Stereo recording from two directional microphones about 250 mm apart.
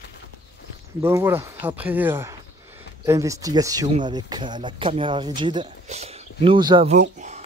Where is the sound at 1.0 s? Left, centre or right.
Centre.